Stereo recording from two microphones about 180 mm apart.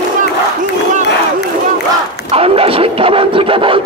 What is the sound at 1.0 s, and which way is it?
Crowd, 70° left (ahead or behind).